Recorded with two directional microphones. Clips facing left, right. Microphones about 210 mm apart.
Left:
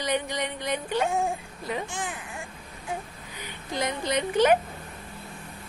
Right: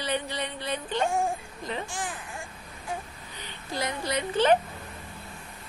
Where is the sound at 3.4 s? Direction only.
15° left (ahead or behind).